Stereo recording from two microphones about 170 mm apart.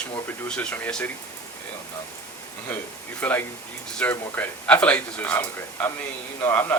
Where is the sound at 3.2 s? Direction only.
10° left (ahead or behind).